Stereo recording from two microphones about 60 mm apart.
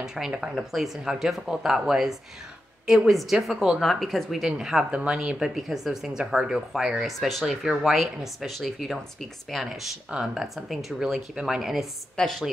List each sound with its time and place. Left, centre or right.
0.0 s speech: centre
12.2 s speech: centre